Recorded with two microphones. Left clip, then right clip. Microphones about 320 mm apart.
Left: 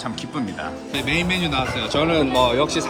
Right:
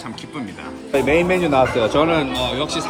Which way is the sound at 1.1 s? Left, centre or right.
Centre.